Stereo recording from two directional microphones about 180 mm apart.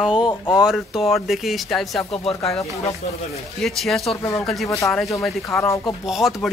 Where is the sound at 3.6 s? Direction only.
Centre (ahead or behind).